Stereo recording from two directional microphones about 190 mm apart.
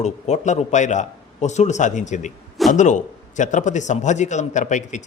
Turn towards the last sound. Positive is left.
turn(degrees=40)  # may be behind; listen again after turning